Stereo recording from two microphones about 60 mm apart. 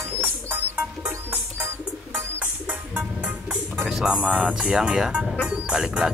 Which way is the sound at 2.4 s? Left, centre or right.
Right.